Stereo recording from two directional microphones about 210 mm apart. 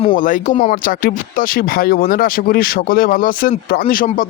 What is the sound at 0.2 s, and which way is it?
Speech, 40° left (ahead or behind).